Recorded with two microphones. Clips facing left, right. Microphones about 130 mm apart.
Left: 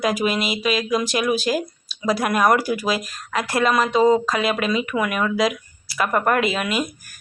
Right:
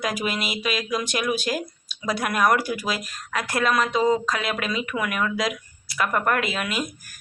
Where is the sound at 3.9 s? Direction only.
30° left (ahead or behind).